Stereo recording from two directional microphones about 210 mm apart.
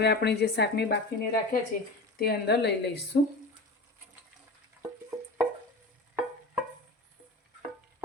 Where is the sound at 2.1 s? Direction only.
50° left (ahead or behind).